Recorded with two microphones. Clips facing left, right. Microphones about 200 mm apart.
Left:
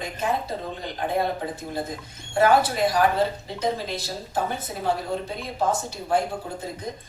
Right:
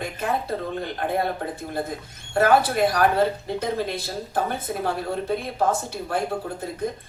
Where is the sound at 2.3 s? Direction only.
55° right (ahead or behind).